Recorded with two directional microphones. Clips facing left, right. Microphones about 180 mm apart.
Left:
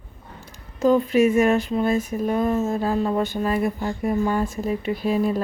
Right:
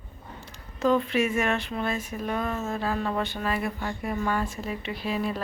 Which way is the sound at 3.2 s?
45° left (ahead or behind).